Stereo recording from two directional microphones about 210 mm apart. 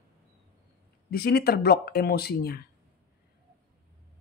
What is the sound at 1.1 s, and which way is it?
Speech, 45° left (ahead or behind).